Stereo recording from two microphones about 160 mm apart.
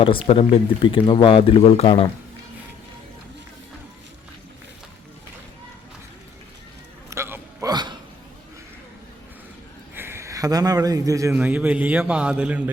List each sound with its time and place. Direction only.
0.0 s speech: 35° left (ahead or behind)
7.1 s music: 15° right (ahead or behind)
7.7 s a sound: 25° right (ahead or behind)
9.9 s a man's voice: 15° right (ahead or behind)
11.3 s a man's voice: 10° right (ahead or behind)